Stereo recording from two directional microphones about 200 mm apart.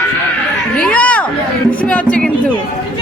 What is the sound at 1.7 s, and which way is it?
Music, 5° left (ahead or behind).